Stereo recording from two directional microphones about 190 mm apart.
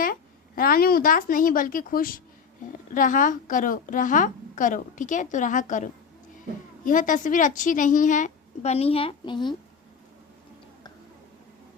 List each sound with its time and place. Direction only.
0.0 s a woman's voice: 50° left (ahead or behind); by 9.6 s 25° left (ahead or behind)